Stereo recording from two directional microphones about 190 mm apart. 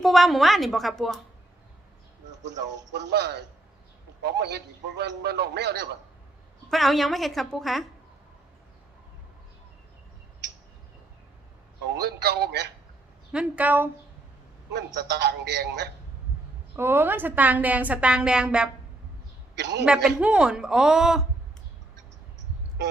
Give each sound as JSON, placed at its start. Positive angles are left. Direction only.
{"t": 0.0, "sound": "a man's voice", "side_deg": 0}
{"t": 2.4, "sound": "a man's voice", "side_deg": -65}
{"t": 6.7, "sound": "a man's voice", "side_deg": 0}
{"t": 11.9, "sound": "a man's voice", "side_deg": -60}
{"t": 13.3, "sound": "speech", "side_deg": -5}
{"t": 14.9, "sound": "a man's voice", "side_deg": -60}
{"t": 16.7, "sound": "speech", "side_deg": -10}
{"t": 19.5, "sound": "a man's voice", "side_deg": -60}
{"t": 19.8, "sound": "a man's voice", "side_deg": -5}